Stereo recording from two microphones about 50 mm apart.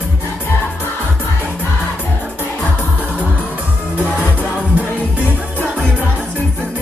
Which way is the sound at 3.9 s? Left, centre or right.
Right.